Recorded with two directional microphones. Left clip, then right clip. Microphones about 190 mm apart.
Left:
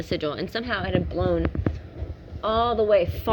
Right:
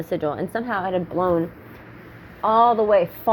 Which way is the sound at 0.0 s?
5° left (ahead or behind).